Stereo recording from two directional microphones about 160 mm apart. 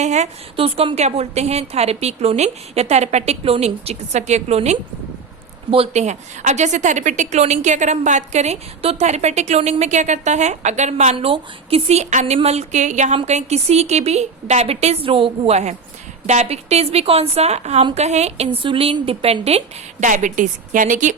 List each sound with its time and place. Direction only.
0.0 s a woman's voice: 45° right (ahead or behind)